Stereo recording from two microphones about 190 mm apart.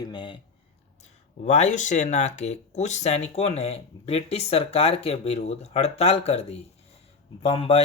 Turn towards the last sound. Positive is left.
turn(degrees=30)  # may be behind; listen again after turning